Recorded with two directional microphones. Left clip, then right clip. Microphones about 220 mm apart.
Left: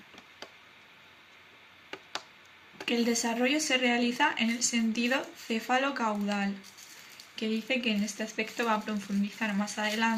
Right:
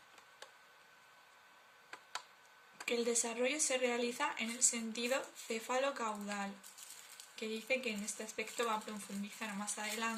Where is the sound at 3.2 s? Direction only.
25° right (ahead or behind).